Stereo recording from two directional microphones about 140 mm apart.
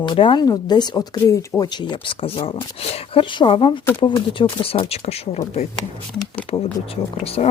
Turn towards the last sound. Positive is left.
turn(degrees=45)  # may be behind; listen again after turning